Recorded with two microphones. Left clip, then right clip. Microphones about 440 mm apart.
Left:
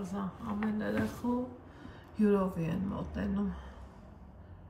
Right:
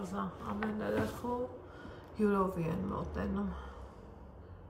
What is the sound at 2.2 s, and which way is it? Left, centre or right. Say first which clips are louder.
Speech: left 2 dB; right.